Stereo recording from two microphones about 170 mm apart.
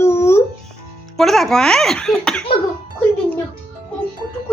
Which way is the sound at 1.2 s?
Centre (ahead or behind).